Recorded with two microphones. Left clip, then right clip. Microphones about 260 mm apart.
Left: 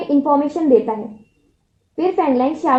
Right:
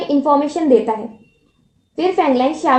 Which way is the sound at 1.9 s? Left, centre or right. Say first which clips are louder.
Right 2 dB; right.